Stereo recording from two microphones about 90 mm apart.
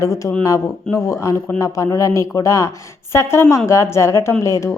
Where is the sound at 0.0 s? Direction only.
35° left (ahead or behind).